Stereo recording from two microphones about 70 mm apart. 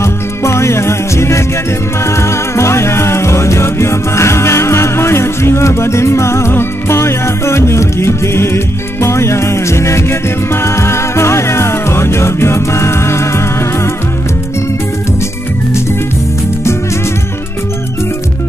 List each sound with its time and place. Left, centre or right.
0.0 s music: left